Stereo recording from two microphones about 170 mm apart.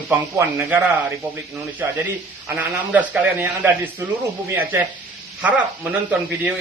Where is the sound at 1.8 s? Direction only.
15° right (ahead or behind).